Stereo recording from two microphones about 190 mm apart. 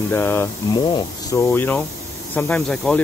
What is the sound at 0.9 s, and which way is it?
Speech, 25° left (ahead or behind).